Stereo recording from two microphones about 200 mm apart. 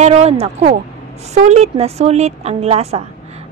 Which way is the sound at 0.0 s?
30° right (ahead or behind).